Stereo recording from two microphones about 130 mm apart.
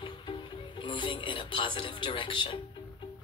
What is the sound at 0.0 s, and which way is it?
Music, 40° left (ahead or behind).